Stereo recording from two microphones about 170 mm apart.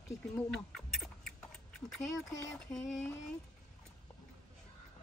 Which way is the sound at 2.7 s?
Centre (ahead or behind).